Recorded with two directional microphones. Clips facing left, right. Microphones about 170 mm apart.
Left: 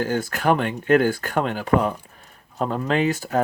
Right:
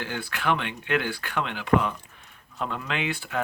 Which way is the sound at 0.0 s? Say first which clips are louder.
Left 8 dB; 45° left (ahead or behind).